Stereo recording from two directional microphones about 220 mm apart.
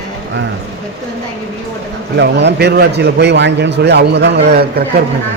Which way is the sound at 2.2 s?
50° right (ahead or behind).